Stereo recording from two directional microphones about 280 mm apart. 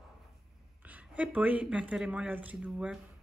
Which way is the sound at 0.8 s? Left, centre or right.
Centre.